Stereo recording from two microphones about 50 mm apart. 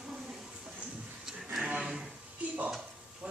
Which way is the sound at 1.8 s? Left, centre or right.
Centre.